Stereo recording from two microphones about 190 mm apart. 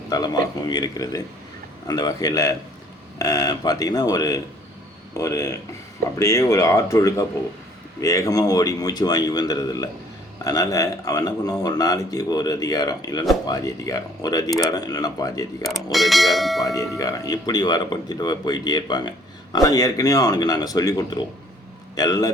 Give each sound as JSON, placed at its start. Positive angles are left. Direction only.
{"t": 0.7, "sound": "speech", "side_deg": 20}
{"t": 15.6, "sound": "speech", "side_deg": 0}
{"t": 16.6, "sound": "speech", "side_deg": 20}